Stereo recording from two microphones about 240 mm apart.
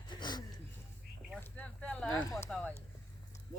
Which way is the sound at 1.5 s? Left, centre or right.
Centre.